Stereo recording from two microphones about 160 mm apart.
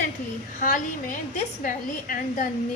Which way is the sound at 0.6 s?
55° left (ahead or behind).